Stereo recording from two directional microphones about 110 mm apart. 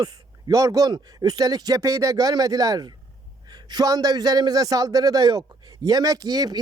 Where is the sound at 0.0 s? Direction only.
35° right (ahead or behind).